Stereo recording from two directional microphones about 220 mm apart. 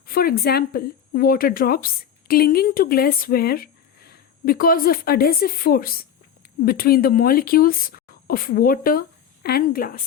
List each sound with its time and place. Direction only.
0.1 s a woman's voice: 40° left (ahead or behind)